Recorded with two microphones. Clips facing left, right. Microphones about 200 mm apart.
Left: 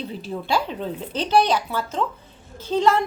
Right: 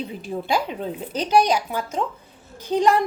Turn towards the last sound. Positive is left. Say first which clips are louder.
# right 1 dB
turn(degrees=-15)  # may be behind; listen again after turning